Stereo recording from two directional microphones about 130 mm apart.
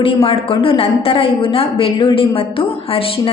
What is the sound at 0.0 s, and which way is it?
A woman's voice, 45° left (ahead or behind).